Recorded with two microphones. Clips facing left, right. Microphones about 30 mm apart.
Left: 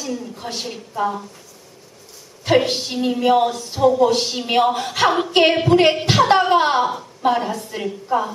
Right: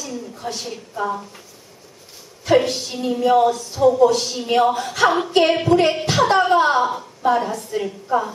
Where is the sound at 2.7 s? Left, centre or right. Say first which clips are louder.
Left 2 dB; left.